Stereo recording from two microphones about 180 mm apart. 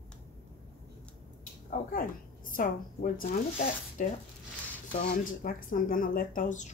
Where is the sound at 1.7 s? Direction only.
50° left (ahead or behind).